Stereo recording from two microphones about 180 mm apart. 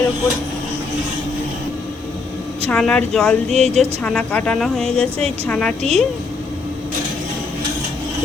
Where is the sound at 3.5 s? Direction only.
35° right (ahead or behind).